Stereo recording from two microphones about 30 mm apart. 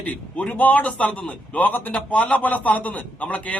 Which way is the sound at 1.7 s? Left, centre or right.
Left.